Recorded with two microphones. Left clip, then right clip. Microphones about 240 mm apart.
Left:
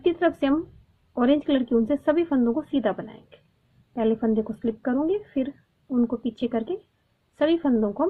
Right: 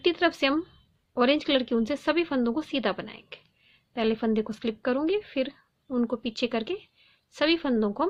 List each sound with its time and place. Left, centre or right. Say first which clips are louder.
0.0 s a woman's voice: left 1 dB; right
5.9 s a woman's voice: left 3 dB; right